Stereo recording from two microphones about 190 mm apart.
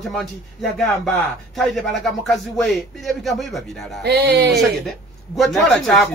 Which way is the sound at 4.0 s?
60° right (ahead or behind).